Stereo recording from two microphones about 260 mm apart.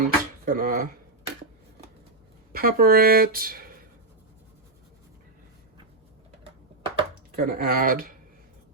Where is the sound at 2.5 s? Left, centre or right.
Right.